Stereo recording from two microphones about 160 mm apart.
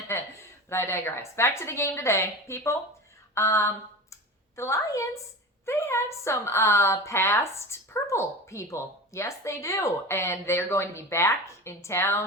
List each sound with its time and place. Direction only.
0.1 s a woman's voice: 15° left (ahead or behind)
4.1 s a sound: 20° left (ahead or behind)
5.6 s a woman's voice: 15° left (ahead or behind)